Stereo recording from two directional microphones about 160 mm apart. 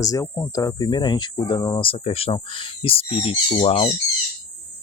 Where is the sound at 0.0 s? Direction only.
20° left (ahead or behind).